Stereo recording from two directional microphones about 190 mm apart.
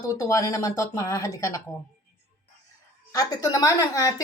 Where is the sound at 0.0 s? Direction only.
20° left (ahead or behind).